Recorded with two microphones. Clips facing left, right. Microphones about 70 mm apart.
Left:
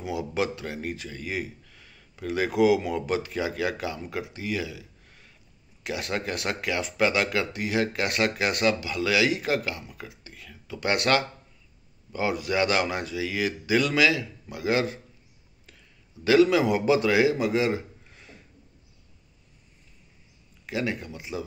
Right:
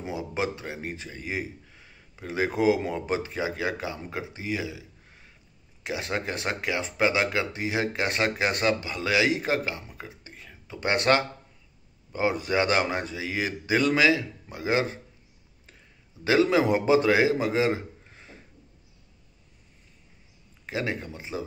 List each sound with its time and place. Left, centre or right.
0.0 s speech: right
16.3 s a man's voice: right
20.6 s speech: right